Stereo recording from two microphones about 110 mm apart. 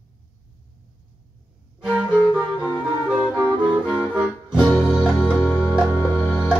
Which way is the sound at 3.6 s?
10° right (ahead or behind).